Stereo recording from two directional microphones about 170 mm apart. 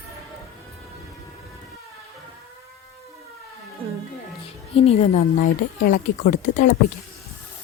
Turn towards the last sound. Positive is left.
turn(degrees=45)  # may be behind; listen again after turning